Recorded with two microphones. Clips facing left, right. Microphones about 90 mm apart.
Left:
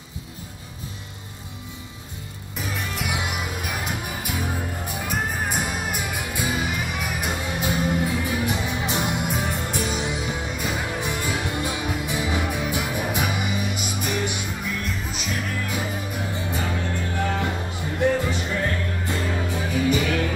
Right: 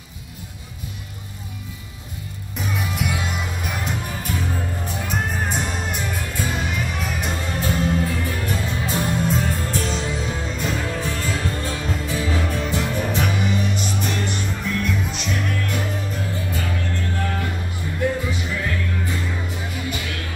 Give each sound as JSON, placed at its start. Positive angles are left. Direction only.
{"t": 2.5, "sound": "music", "side_deg": 0}
{"t": 16.3, "sound": "music", "side_deg": 20}
{"t": 18.2, "sound": "music", "side_deg": 45}